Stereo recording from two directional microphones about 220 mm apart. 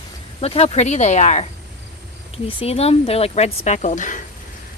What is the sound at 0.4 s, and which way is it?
A woman's voice, 25° left (ahead or behind).